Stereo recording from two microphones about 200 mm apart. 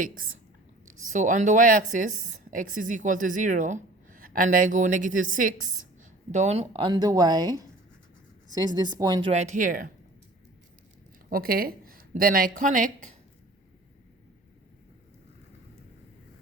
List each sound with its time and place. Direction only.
0.0 s a woman's voice: 45° right (ahead or behind); by 9.3 s 20° right (ahead or behind)
9.3 s speech: 35° right (ahead or behind)
11.3 s speech: 50° right (ahead or behind)